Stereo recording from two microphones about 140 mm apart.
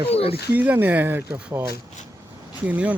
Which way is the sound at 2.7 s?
10° right (ahead or behind).